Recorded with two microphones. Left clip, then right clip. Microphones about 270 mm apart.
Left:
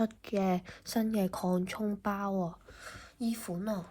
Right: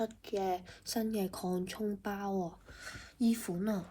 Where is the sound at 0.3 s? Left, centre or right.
Left.